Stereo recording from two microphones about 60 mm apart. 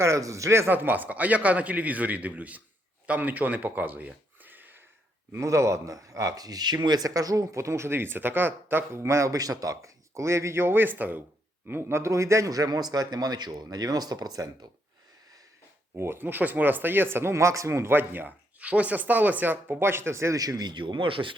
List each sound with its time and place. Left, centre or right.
0.0 s speech: right
0.7 s a man's voice: right
5.3 s speech: right
11.7 s a man's voice: right
16.0 s speech: right
17.9 s speech: right
20.3 s speech: right
20.8 s a man's voice: right
21.2 s speech: right